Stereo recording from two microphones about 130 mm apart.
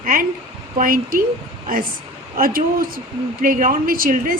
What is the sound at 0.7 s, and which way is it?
Speech, 90° right.